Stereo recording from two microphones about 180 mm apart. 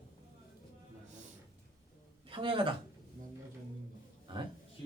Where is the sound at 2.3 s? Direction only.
30° right (ahead or behind).